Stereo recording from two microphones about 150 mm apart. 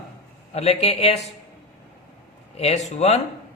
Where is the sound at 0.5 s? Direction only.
40° left (ahead or behind).